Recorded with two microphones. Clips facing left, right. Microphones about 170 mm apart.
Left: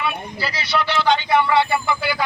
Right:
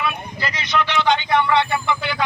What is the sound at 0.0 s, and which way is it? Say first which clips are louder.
Speech: even; 5° left (ahead or behind).